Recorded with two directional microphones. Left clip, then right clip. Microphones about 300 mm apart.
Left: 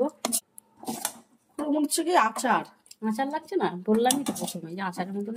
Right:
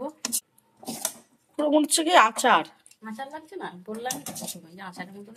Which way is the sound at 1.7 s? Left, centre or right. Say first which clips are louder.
Right 4 dB; centre.